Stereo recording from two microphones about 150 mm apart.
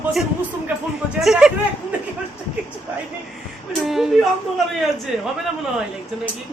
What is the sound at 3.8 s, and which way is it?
Speech, centre (ahead or behind).